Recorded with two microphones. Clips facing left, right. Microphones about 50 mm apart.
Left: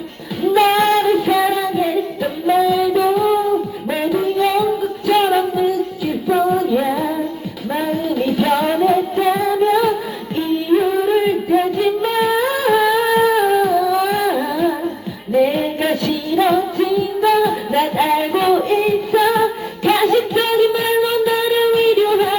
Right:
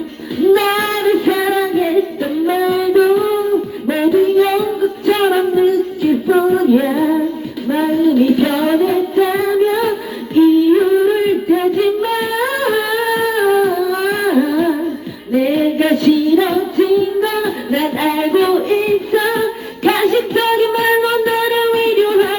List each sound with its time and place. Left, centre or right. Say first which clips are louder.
0.3 s child singing: right 1 dB; centre
3.8 s music: right 7 dB; centre
6.2 s female singing: right 2 dB; centre
7.7 s music: right 7 dB; centre
14.2 s carnatic music: right 3 dB; centre
15.3 s music: right 2 dB; centre
21.2 s a sound: right 1 dB; centre